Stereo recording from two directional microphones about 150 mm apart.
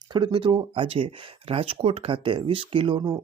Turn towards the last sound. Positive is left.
turn(degrees=-30)  # may be behind; listen again after turning